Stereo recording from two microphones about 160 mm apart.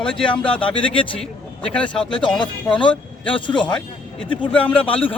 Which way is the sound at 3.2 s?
35° left (ahead or behind).